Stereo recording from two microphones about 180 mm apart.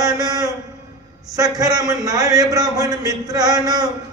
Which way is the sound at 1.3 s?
20° right (ahead or behind).